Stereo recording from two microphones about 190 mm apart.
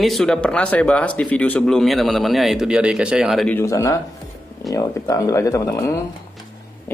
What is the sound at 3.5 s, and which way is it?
Speech, 15° left (ahead or behind).